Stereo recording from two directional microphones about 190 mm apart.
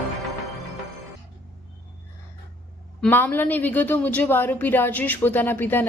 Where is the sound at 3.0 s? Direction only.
10° left (ahead or behind).